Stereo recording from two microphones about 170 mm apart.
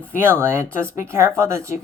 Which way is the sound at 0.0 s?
15° right (ahead or behind).